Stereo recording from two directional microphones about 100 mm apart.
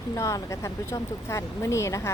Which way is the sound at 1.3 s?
30° left (ahead or behind).